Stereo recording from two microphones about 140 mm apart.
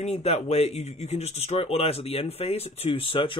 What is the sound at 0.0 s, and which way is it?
Speech, 50° left (ahead or behind).